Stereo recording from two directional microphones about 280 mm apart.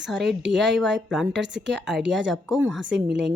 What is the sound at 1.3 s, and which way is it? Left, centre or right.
Speech, right.